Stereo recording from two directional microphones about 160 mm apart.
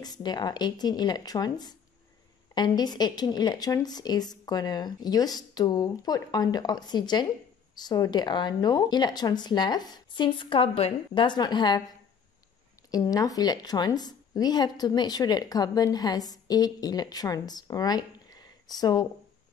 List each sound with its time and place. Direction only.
0.0 s a woman's voice: 25° left (ahead or behind)
12.9 s a woman's voice: 25° left (ahead or behind)